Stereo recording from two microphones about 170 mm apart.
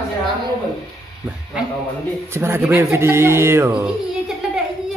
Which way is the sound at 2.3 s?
15° right (ahead or behind).